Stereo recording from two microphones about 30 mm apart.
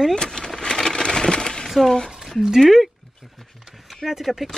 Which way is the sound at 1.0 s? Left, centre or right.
Left.